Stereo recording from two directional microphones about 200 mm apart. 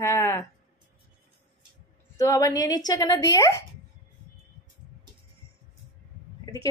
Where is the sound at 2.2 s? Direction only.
15° left (ahead or behind).